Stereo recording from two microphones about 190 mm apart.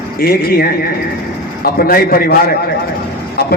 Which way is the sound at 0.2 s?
50° left (ahead or behind).